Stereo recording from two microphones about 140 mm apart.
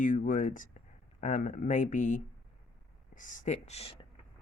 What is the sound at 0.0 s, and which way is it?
Speech, 70° left (ahead or behind).